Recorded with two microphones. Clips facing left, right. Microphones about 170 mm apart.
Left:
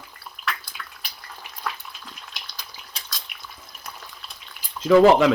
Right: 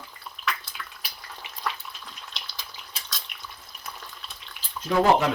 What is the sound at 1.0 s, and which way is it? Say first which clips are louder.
Frying: even; centre (ahead or behind).